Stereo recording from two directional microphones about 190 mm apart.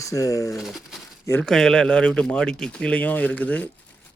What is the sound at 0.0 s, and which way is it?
Speech, 15° left (ahead or behind).